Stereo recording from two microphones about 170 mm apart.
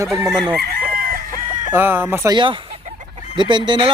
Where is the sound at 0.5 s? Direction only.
65° right (ahead or behind).